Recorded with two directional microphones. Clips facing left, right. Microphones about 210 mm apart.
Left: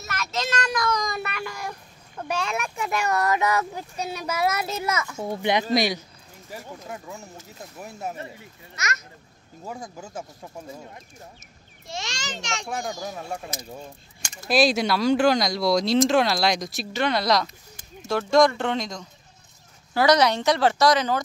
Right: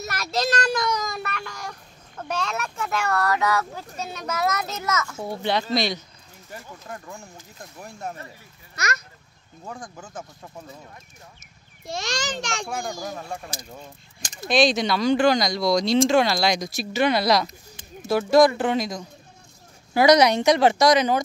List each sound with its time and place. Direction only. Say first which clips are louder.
0.0 s a child's voice: right 4 dB; 35° right (ahead or behind)
0.9 s a child's voice: left 1 dB; centre (ahead or behind)
8.7 s a child's voice: right 3 dB; 35° right (ahead or behind)
9.7 s speech: left 2 dB; 10° left (ahead or behind)
12.6 s speech: even; centre (ahead or behind)
14.5 s speech: even; 5° left (ahead or behind); by 21.2 s 15° right (ahead or behind)